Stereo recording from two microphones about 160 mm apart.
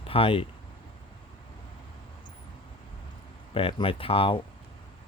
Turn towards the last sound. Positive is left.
turn(degrees=35)  # may be behind; listen again after turning